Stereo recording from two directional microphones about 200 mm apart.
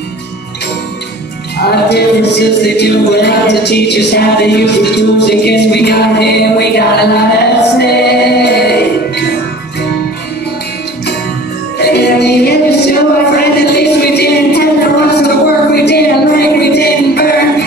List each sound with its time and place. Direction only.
1.7 s music: 55° left (ahead or behind)
11.8 s music: 55° left (ahead or behind)
13.7 s a sound: 55° left (ahead or behind)